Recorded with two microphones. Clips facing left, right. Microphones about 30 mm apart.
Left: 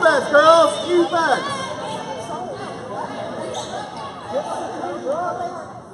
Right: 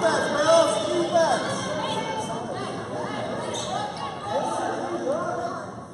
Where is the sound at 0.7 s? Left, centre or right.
Left.